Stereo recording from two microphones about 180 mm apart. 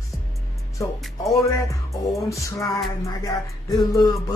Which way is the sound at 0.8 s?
15° left (ahead or behind).